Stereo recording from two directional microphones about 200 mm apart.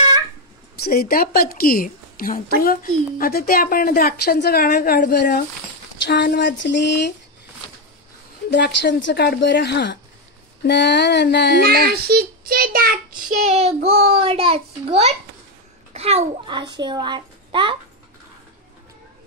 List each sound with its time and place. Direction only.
0.8 s speech: 50° left (ahead or behind)
6.0 s speech: 60° left (ahead or behind)
8.5 s speech: 60° left (ahead or behind)
11.6 s a child's voice: 50° right (ahead or behind); by 17.7 s 25° right (ahead or behind)